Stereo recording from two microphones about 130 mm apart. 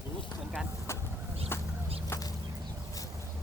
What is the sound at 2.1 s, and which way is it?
Chicken, 20° left (ahead or behind).